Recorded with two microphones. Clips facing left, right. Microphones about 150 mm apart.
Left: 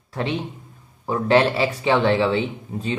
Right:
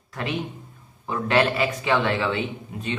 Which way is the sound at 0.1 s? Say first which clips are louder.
Left 3 dB; 30° left (ahead or behind).